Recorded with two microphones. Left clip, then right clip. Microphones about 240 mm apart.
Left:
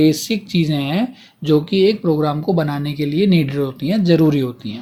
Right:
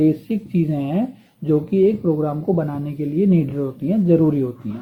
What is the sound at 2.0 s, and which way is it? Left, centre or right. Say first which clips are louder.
Speech: left 3 dB; left.